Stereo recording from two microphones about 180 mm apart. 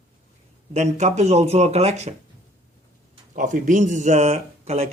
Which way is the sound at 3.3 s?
45° right (ahead or behind).